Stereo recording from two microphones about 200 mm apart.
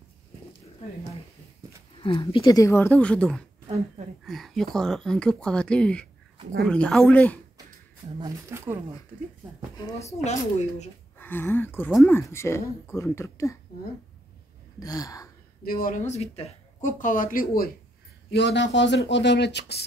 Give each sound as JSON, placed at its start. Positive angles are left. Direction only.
{"t": 2.0, "sound": "speech", "side_deg": 25}
{"t": 8.2, "sound": "speech", "side_deg": -15}
{"t": 10.2, "sound": "speech", "side_deg": 35}
{"t": 11.1, "sound": "speech", "side_deg": 10}
{"t": 14.8, "sound": "speech", "side_deg": 20}
{"t": 15.6, "sound": "speech", "side_deg": 45}
{"t": 18.3, "sound": "speech", "side_deg": 60}